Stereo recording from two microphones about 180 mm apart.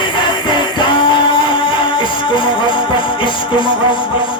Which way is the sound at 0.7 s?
25° left (ahead or behind).